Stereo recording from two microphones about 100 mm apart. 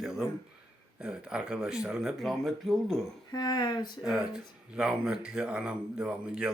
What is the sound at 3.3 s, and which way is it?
Speech, 45° left (ahead or behind).